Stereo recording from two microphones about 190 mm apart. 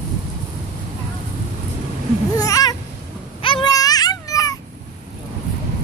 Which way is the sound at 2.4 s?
20° left (ahead or behind).